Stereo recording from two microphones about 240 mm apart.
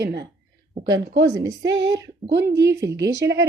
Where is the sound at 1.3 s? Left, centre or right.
Centre.